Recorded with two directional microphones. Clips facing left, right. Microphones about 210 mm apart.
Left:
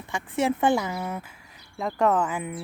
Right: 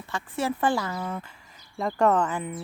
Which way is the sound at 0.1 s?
20° left (ahead or behind).